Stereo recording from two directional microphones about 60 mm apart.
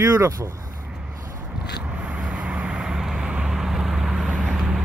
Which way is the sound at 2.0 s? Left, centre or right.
Right.